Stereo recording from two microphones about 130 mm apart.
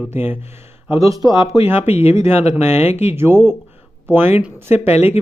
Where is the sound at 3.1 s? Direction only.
15° right (ahead or behind).